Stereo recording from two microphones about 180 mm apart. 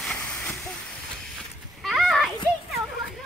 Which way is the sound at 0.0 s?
5° left (ahead or behind).